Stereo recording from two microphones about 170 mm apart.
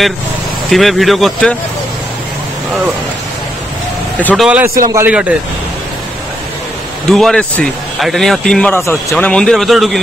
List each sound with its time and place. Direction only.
0.7 s speech: centre (ahead or behind)
4.2 s speech: 10° left (ahead or behind)
4.5 s a man's voice: 10° right (ahead or behind)
7.1 s speech: 5° left (ahead or behind)